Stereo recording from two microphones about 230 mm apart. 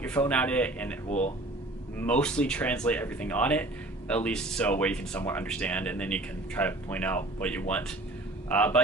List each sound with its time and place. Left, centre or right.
0.0 s speech: centre
1.0 s speech: left
2.0 s speech: centre